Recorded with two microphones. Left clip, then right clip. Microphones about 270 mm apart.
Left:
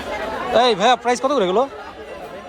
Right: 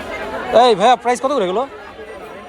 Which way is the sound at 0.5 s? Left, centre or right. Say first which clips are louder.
Right 4 dB; centre.